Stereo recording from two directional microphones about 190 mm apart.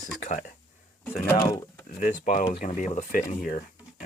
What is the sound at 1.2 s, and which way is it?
Speech, 20° left (ahead or behind).